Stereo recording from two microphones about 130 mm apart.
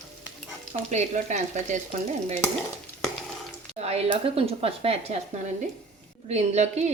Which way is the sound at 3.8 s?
50° right (ahead or behind).